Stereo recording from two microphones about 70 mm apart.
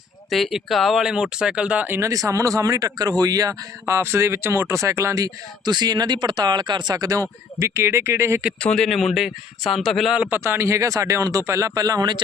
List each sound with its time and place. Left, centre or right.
0.3 s speech: centre
2.0 s speech: right
3.8 s speech: right
5.6 s speech: right
8.6 s speech: centre
8.9 s a man's voice: centre
10.1 s speech: centre
10.3 s speech: right